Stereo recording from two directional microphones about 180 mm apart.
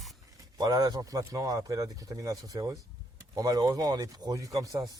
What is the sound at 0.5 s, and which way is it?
Speech, 20° right (ahead or behind).